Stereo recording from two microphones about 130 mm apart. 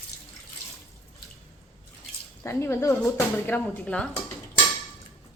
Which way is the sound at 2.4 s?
20° left (ahead or behind).